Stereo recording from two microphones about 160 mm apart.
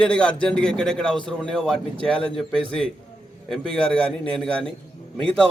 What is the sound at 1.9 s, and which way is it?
Speech, 35° right (ahead or behind).